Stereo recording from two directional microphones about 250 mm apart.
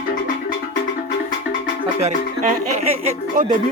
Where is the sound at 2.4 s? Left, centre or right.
Right.